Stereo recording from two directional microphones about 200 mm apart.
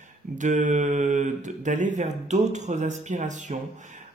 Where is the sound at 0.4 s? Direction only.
40° right (ahead or behind).